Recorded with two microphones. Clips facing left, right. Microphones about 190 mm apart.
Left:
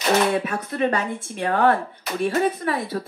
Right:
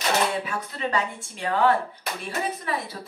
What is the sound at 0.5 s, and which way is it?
Speech, 50° left (ahead or behind).